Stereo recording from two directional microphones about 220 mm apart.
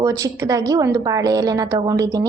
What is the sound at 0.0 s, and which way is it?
A woman's voice, 15° right (ahead or behind).